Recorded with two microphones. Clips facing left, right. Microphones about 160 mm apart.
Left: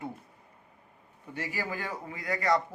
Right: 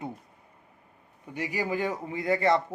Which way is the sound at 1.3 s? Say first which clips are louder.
Right 5 dB; 15° right (ahead or behind).